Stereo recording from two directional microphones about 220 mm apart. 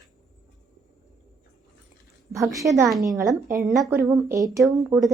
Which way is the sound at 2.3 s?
15° right (ahead or behind).